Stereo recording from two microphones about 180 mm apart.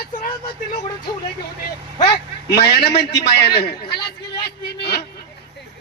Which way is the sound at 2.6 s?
65° left (ahead or behind).